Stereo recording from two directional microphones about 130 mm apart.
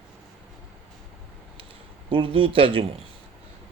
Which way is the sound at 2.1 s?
40° right (ahead or behind).